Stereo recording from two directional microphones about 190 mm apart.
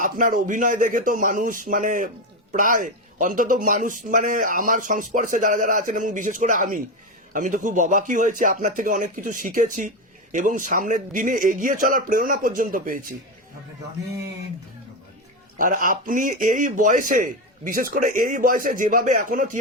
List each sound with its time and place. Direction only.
0.0 s a man's voice: 45° right (ahead or behind)
15.5 s a man's voice: 45° right (ahead or behind)